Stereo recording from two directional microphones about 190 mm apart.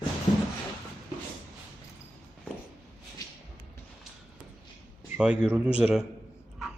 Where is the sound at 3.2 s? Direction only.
20° left (ahead or behind).